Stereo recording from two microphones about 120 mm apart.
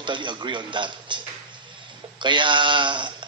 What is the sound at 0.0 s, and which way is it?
A man's voice, 40° right (ahead or behind).